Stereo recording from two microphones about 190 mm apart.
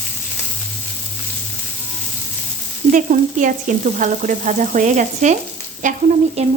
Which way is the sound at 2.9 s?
40° right (ahead or behind).